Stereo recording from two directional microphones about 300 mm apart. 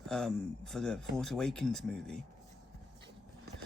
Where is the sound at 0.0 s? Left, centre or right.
Centre.